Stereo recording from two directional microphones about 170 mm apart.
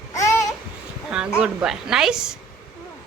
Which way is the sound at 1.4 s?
5° right (ahead or behind).